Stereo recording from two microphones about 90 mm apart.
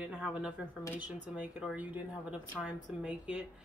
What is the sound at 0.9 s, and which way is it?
Speech, 15° right (ahead or behind).